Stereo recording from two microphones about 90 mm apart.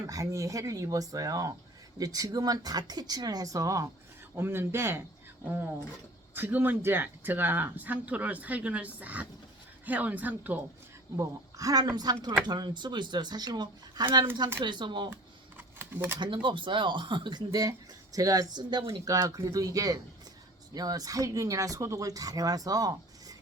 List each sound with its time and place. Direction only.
0.1 s speech: 40° right (ahead or behind)
4.4 s speech: 25° right (ahead or behind)
11.2 s speech: 40° right (ahead or behind); by 15.1 s 60° right (ahead or behind)
15.1 s typing: 25° right (ahead or behind)
16.1 s speech: 60° right (ahead or behind)
17.5 s speech: 45° right (ahead or behind)
18.5 s speech: 55° right (ahead or behind)
19.0 s speech: 40° right (ahead or behind)